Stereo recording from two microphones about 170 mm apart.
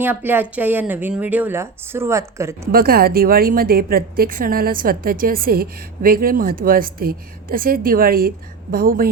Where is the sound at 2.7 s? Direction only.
60° right (ahead or behind).